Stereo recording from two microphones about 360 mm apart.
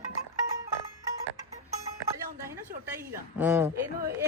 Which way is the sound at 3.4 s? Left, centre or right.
Centre.